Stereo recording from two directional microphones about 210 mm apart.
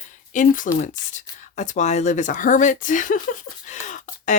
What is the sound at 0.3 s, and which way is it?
Speech, 40° left (ahead or behind).